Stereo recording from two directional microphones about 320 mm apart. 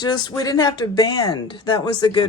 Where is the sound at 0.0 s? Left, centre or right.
Centre.